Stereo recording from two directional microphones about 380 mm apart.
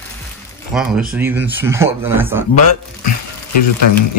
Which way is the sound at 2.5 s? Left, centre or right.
Left.